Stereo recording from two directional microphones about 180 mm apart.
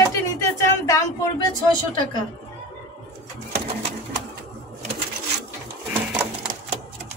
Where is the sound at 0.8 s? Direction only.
20° left (ahead or behind).